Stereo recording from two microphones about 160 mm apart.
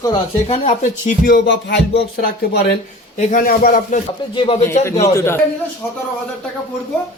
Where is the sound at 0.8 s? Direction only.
60° left (ahead or behind); by 1.8 s 75° left (ahead or behind).